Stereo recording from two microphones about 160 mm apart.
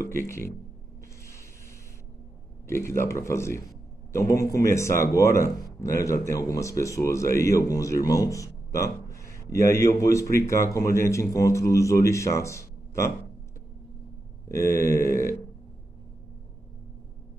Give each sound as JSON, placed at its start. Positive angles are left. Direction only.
{"t": 0.0, "sound": "a man's voice", "side_deg": 15}
{"t": 3.1, "sound": "a man's voice", "side_deg": 20}
{"t": 14.5, "sound": "a man's voice", "side_deg": 20}